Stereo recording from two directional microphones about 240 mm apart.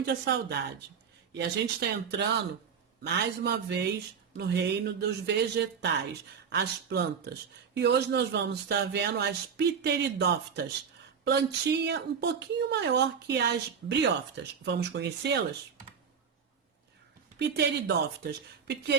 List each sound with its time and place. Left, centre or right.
0.0 s speech: right
17.3 s speech: right